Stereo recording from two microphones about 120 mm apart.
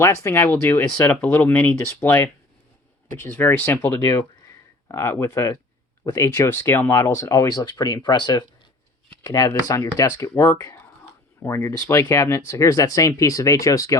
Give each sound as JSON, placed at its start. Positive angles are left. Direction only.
{"t": 0.0, "sound": "speech", "side_deg": 20}